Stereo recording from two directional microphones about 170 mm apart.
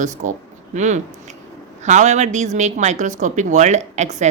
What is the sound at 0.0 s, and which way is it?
Speech, 45° right (ahead or behind).